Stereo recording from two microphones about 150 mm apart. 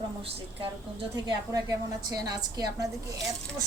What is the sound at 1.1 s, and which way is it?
A woman's voice, 25° right (ahead or behind).